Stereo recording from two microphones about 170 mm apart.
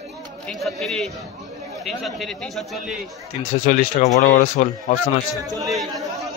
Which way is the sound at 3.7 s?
50° left (ahead or behind).